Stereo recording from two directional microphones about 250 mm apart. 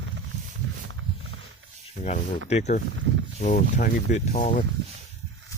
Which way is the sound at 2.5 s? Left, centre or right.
Left.